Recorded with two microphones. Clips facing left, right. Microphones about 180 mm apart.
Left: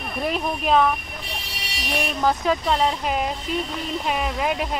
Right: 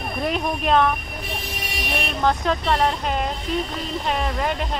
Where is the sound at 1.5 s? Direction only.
50° right (ahead or behind).